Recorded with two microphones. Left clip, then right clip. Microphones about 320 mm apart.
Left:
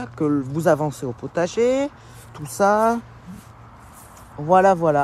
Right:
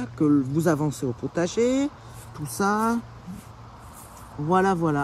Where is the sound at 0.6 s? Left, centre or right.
Centre.